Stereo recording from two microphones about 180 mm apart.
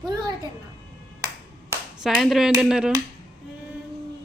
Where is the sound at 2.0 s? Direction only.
Centre (ahead or behind).